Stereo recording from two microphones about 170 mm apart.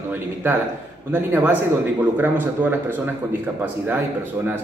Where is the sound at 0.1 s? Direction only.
15° right (ahead or behind).